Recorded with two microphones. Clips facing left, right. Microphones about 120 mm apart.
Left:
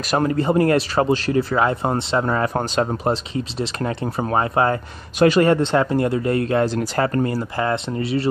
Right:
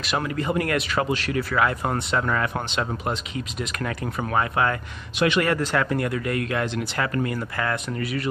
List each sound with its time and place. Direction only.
0.1 s speech: 35° left (ahead or behind)